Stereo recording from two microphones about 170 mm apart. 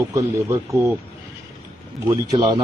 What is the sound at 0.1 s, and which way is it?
Speech, 15° right (ahead or behind).